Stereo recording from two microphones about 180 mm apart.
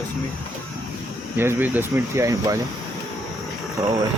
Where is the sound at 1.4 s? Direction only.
10° right (ahead or behind).